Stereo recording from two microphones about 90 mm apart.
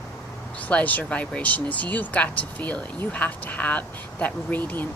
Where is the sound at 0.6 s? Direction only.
15° left (ahead or behind).